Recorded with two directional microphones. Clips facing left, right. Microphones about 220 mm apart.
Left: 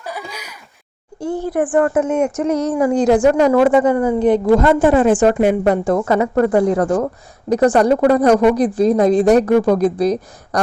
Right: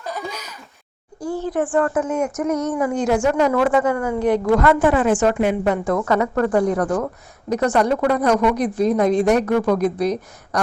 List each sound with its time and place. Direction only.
0.0 s a sound: 10° left (ahead or behind)
1.5 s a woman's voice: 15° left (ahead or behind); by 3.2 s 35° left (ahead or behind)
3.5 s a woman's voice: 25° left (ahead or behind)